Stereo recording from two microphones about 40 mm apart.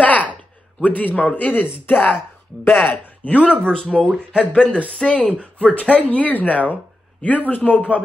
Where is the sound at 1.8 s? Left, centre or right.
Left.